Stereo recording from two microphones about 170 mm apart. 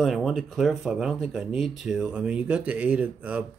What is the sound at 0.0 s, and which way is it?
Speech, centre (ahead or behind).